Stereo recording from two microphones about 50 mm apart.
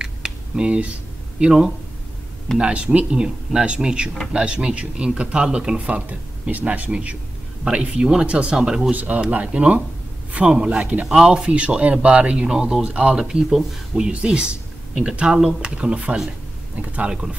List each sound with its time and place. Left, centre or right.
0.0 s a sound: centre
1.4 s speech: centre
2.6 s speech: right
8.9 s speech: right
12.4 s speech: centre
13.2 s speech: centre; by 17.1 s right
17.1 s speech: centre